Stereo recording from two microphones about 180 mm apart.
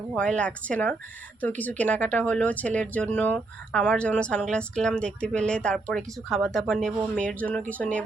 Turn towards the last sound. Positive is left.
turn(degrees=10)  # may be behind; listen again after turning